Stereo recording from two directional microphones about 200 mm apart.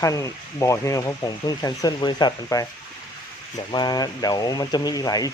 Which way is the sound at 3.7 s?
20° left (ahead or behind).